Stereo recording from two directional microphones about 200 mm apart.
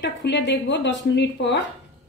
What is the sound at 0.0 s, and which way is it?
A woman's voice, 60° left (ahead or behind).